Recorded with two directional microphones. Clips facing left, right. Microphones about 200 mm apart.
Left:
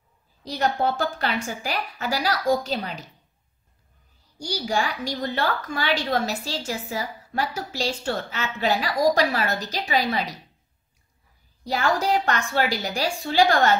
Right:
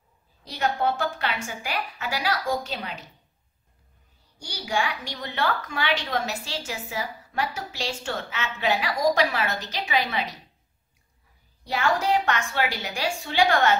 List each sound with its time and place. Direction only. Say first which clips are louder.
0.5 s a woman's voice: left 2 dB; 40° left (ahead or behind)
4.4 s a woman's voice: left 3 dB; 40° left (ahead or behind)
11.6 s a woman's voice: left 1 dB; 40° left (ahead or behind)